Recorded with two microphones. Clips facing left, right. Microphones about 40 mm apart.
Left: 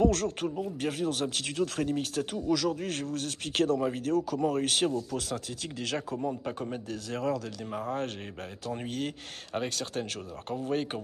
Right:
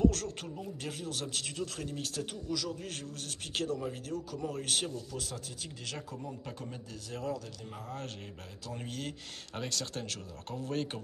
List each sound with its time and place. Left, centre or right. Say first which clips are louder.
0.0 s speech: left 4 dB; left
0.4 s speech: left 9 dB; left
2.3 s speech: left 9 dB; left
6.2 s a man's voice: left 9 dB; left
6.9 s speech: left 7 dB; left
7.7 s a man's voice: left 10 dB; left